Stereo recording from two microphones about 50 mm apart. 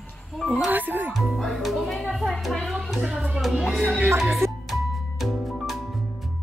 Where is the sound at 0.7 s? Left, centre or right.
Right.